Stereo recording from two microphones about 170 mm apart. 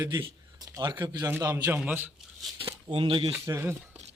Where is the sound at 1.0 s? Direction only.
20° right (ahead or behind).